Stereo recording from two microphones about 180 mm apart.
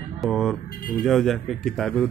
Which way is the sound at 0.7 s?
50° left (ahead or behind).